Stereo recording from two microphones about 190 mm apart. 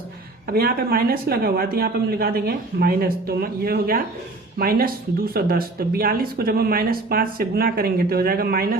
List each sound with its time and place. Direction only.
0.4 s speech: 50° right (ahead or behind)